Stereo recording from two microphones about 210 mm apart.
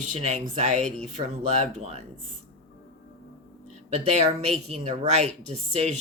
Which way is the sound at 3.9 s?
30° right (ahead or behind).